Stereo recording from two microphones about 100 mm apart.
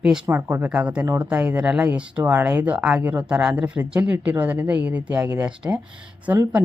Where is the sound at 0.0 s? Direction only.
5° right (ahead or behind).